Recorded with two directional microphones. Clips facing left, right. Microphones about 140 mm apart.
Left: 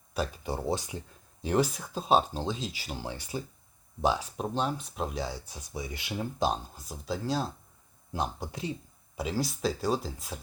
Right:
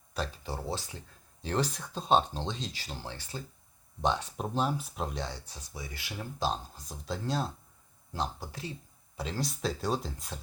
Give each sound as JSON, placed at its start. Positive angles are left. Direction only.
{"t": 0.1, "sound": "speech", "side_deg": 10}
{"t": 8.1, "sound": "speech", "side_deg": 15}
{"t": 9.1, "sound": "speech", "side_deg": 5}